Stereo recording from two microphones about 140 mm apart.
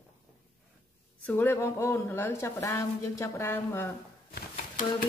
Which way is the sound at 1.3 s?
15° left (ahead or behind).